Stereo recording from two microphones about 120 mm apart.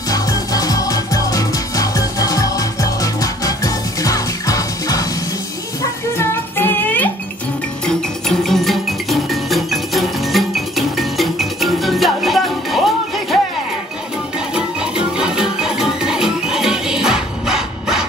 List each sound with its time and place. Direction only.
0.1 s music: 30° left (ahead or behind); by 7.1 s 15° left (ahead or behind)
7.8 s music: 5° left (ahead or behind)
14.5 s music: 5° right (ahead or behind)